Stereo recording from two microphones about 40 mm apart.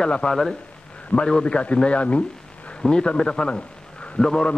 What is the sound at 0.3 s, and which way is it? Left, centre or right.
Speech, centre.